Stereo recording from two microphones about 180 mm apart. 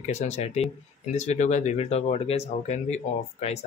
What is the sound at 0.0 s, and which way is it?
Speech, 40° left (ahead or behind).